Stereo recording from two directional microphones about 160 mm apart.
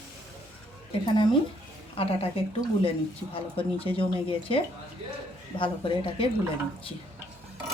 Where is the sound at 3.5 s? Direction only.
35° left (ahead or behind).